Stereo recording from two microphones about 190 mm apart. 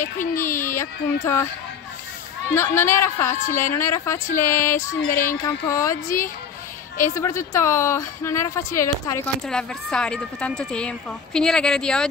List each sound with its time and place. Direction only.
0.0 s a child's voice: 40° left (ahead or behind)
0.6 s a woman's voice: 15° left (ahead or behind)
2.5 s a woman's voice: 15° left (ahead or behind)
6.0 s a woman's voice: 45° left (ahead or behind)
7.2 s a woman's voice: 15° left (ahead or behind)
9.5 s a woman's voice: 5° left (ahead or behind)